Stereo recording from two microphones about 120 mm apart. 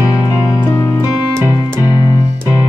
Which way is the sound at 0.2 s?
35° left (ahead or behind).